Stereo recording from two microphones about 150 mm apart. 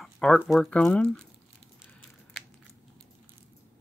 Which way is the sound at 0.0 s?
Centre (ahead or behind).